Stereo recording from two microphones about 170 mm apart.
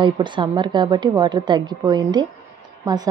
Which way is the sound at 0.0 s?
30° right (ahead or behind).